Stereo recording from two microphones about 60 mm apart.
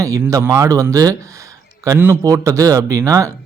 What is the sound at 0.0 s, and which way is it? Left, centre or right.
Speech, right.